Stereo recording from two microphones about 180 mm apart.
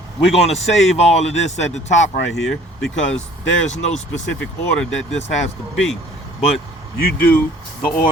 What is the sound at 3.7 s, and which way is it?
Speech, 40° left (ahead or behind).